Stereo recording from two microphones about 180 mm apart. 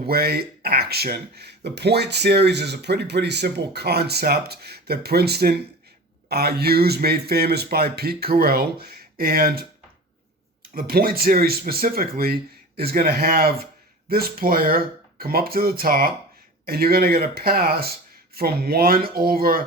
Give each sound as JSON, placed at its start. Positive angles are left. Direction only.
{"t": 0.0, "sound": "speech", "side_deg": -60}